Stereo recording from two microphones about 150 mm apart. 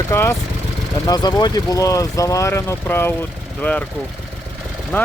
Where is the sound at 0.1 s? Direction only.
15° left (ahead or behind).